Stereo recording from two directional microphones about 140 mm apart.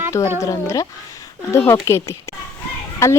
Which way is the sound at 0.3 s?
20° left (ahead or behind).